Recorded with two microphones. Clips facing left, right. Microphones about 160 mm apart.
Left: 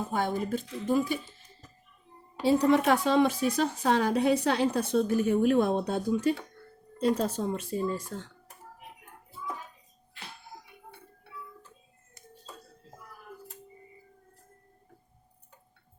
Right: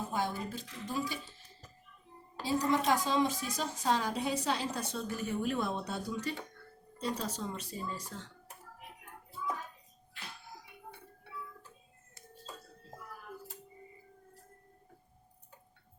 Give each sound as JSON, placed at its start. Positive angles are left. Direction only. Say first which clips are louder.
{"t": 0.1, "sound": "a woman's voice", "louder": "left 9 dB", "side_deg": 55}
{"t": 2.4, "sound": "a woman's voice", "louder": "left 8 dB", "side_deg": 65}